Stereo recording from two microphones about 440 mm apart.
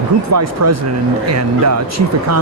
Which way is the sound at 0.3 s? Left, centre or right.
Right.